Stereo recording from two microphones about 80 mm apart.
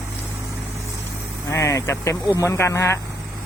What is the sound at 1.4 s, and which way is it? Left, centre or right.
Speech, left.